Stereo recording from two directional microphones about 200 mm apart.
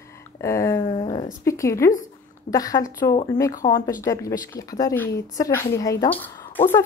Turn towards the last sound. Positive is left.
turn(degrees=10)  # may be behind; listen again after turning